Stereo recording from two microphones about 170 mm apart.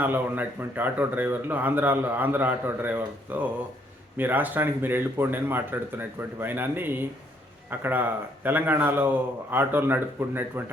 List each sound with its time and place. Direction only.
0.0 s a man's voice: 10° right (ahead or behind)